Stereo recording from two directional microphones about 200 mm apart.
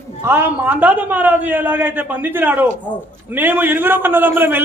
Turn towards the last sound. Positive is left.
turn(degrees=-10)  # may be behind; listen again after turning